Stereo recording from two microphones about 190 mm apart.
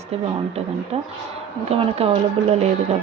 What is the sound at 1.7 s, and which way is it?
Speech, 35° right (ahead or behind).